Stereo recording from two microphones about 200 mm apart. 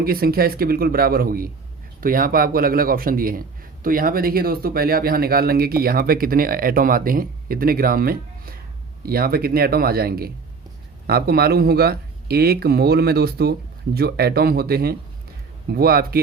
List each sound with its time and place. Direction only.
0.0 s speech: 50° right (ahead or behind)